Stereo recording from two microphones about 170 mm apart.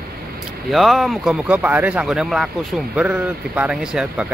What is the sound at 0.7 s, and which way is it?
Speech, centre (ahead or behind).